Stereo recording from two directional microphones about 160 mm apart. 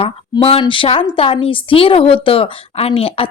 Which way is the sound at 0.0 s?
35° left (ahead or behind).